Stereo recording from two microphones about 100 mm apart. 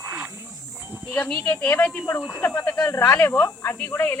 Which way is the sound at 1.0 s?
20° left (ahead or behind).